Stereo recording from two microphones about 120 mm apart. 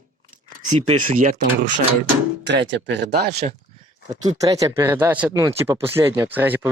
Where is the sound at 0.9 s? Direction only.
65° right (ahead or behind).